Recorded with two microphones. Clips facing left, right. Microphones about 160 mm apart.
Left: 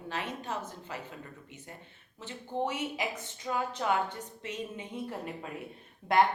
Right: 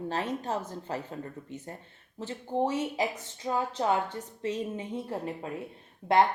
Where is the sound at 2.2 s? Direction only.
35° right (ahead or behind).